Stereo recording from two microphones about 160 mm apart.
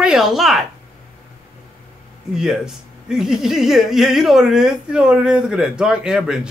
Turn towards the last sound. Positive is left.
turn(degrees=-5)  # may be behind; listen again after turning